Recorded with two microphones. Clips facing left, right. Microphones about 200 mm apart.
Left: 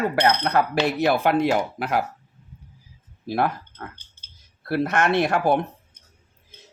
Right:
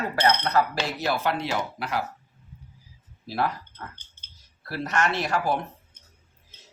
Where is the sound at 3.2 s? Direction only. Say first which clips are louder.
Left 4 dB; 55° left (ahead or behind).